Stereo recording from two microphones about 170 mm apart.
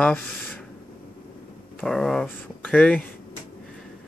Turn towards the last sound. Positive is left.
turn(degrees=10)  # may be behind; listen again after turning